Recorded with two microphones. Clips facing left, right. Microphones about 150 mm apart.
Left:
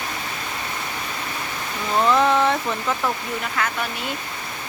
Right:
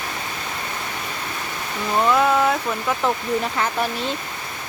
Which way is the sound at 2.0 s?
5° right (ahead or behind).